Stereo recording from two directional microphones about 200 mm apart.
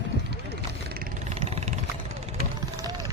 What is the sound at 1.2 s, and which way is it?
Vehicle, 30° right (ahead or behind).